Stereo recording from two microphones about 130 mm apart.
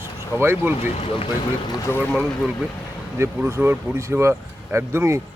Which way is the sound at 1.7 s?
20° left (ahead or behind).